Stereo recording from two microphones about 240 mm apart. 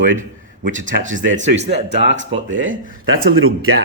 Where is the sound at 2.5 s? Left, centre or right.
Right.